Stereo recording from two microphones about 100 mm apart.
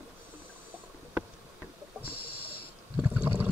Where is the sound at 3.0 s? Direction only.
15° right (ahead or behind).